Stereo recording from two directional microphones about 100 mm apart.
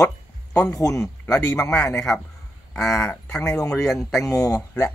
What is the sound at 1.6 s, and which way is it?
A man's voice, 10° left (ahead or behind).